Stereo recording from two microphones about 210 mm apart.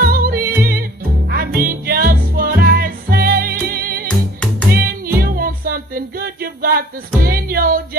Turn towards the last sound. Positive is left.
turn(degrees=-45)  # may be behind; listen again after turning